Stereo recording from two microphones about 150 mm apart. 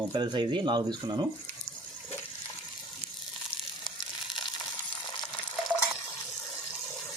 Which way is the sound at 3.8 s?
30° left (ahead or behind).